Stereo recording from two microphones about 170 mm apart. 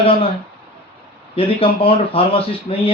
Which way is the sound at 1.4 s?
35° left (ahead or behind).